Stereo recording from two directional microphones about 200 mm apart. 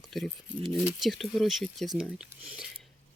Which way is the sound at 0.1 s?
Centre (ahead or behind).